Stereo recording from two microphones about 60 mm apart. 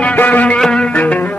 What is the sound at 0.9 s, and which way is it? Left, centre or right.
Music, left.